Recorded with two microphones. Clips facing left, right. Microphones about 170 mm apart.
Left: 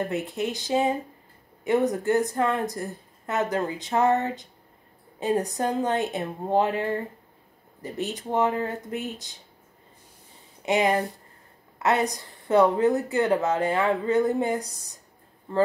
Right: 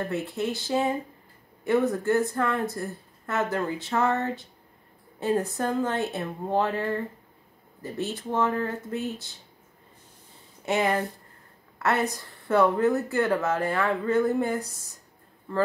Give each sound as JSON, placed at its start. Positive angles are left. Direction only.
{"t": 0.0, "sound": "a woman's voice", "side_deg": 15}
{"t": 10.6, "sound": "a woman's voice", "side_deg": 15}